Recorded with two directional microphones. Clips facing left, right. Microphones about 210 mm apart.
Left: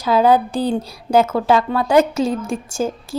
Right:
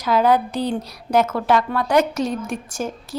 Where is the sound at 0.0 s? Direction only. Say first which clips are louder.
Left 3 dB; 30° left (ahead or behind).